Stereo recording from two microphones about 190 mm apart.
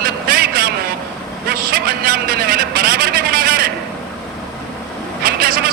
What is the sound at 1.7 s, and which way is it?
Speech, 55° right (ahead or behind).